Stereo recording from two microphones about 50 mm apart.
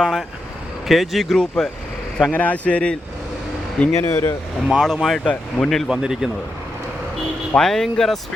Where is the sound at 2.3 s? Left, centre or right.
Left.